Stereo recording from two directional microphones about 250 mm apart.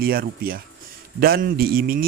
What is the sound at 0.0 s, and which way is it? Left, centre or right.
Speech, right.